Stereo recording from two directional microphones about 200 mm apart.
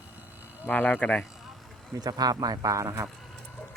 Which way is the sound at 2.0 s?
20° right (ahead or behind).